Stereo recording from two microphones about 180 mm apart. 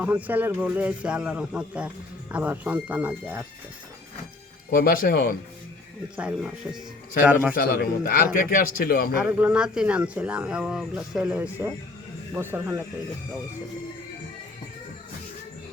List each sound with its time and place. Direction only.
0.0 s a man's voice: 10° right (ahead or behind)
4.7 s a man's voice: 55° left (ahead or behind)
6.1 s a man's voice: 5° right (ahead or behind)
7.5 s a man's voice: 50° left (ahead or behind)
9.2 s a man's voice: 5° right (ahead or behind)